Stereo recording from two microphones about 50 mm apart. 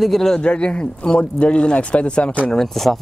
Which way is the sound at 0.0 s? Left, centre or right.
Centre.